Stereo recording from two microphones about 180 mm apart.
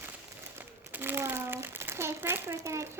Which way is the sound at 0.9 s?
10° right (ahead or behind).